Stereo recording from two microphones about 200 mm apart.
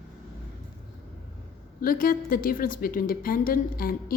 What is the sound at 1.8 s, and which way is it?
Speech, 45° left (ahead or behind).